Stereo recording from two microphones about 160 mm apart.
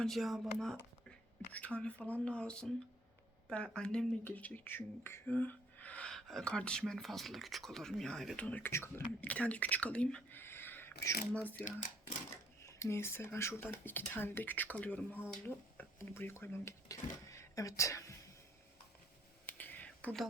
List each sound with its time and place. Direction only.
0.0 s speech: centre (ahead or behind)
12.6 s speech: 15° left (ahead or behind)
19.5 s a sound: 10° left (ahead or behind)